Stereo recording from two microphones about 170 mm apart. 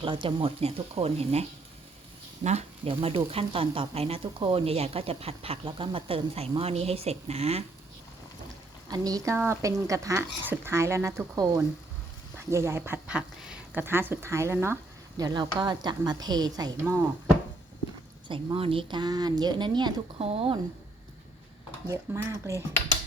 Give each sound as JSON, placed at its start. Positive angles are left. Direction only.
{"t": 0.0, "sound": "speech", "side_deg": -30}
{"t": 8.9, "sound": "speech", "side_deg": -20}
{"t": 15.2, "sound": "speech", "side_deg": -25}
{"t": 18.3, "sound": "speech", "side_deg": -30}
{"t": 21.8, "sound": "speech", "side_deg": -15}